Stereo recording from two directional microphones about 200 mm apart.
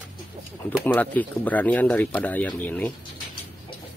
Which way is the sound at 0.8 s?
10° left (ahead or behind).